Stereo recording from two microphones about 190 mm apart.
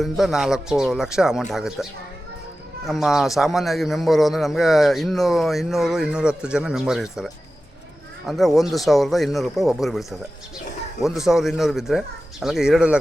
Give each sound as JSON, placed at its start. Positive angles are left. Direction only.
{"t": 0.0, "sound": "speech", "side_deg": 0}
{"t": 8.3, "sound": "speech", "side_deg": 0}